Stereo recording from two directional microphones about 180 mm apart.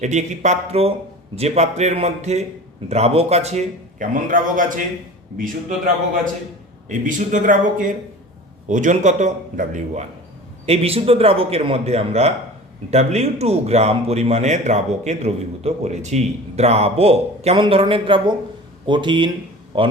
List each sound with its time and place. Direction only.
0.0 s a man's voice: 40° right (ahead or behind)